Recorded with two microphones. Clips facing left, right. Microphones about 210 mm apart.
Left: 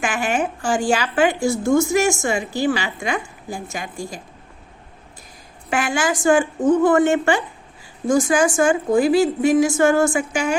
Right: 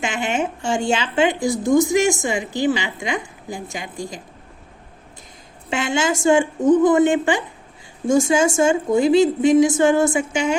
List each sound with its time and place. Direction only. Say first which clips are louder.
0.0 s a woman's voice: left 1 dB; 20° right (ahead or behind)
5.7 s a woman's voice: even; 25° right (ahead or behind)